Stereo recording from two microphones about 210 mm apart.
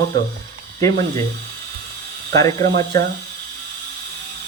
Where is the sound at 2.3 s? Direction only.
15° left (ahead or behind).